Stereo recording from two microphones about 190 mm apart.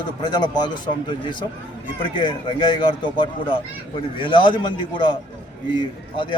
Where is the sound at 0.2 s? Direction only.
20° left (ahead or behind).